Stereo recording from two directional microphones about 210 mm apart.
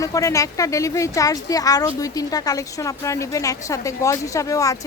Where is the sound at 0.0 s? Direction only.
15° left (ahead or behind).